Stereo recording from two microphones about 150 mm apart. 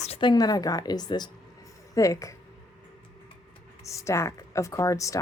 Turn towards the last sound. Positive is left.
turn(degrees=20)  # may be behind; listen again after turning